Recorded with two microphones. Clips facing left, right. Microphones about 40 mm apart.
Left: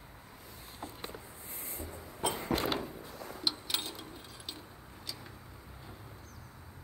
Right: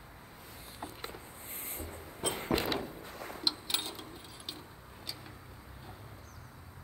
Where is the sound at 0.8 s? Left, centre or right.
Centre.